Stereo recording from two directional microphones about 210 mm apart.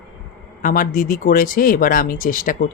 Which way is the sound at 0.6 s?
40° left (ahead or behind).